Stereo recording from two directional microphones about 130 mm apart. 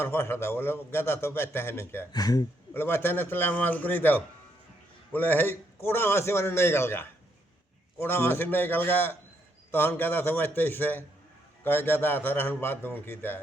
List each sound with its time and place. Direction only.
0.0 s a man's voice: 20° left (ahead or behind)
2.1 s a man's voice: 30° left (ahead or behind)
2.7 s a man's voice: 15° left (ahead or behind)